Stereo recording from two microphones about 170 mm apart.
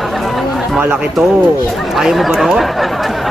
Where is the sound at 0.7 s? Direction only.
10° right (ahead or behind).